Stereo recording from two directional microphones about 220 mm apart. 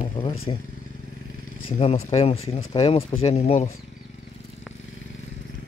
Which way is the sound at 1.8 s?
30° left (ahead or behind).